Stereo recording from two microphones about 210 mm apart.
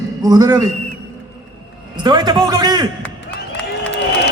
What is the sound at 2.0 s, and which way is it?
Music, 20° right (ahead or behind).